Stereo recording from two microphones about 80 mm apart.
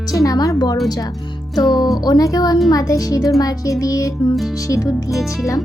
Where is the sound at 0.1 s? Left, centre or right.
Left.